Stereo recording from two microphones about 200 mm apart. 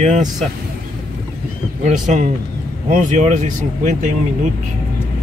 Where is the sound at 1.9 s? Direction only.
40° right (ahead or behind).